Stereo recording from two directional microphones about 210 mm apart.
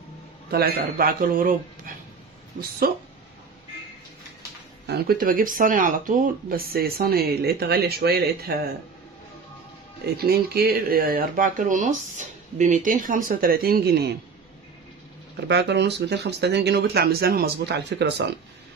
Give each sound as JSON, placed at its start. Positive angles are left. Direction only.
{"t": 0.5, "sound": "speech", "side_deg": -50}
{"t": 2.6, "sound": "speech", "side_deg": -55}
{"t": 4.8, "sound": "speech", "side_deg": -50}
{"t": 10.0, "sound": "speech", "side_deg": -50}
{"t": 15.4, "sound": "speech", "side_deg": -55}